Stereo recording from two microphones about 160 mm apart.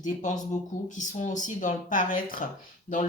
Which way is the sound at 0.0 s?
50° left (ahead or behind).